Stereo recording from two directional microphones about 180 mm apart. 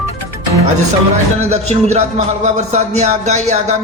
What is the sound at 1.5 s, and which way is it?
Music, 40° right (ahead or behind).